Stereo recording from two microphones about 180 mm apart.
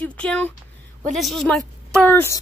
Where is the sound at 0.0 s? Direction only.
5° left (ahead or behind).